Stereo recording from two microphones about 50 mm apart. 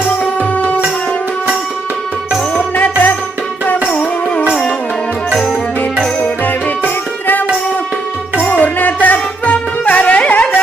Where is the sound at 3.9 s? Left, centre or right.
Left.